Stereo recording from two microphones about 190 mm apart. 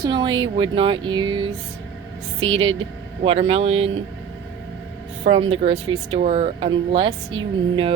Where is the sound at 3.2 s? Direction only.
30° right (ahead or behind).